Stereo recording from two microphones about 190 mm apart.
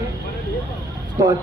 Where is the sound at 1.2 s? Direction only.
20° right (ahead or behind).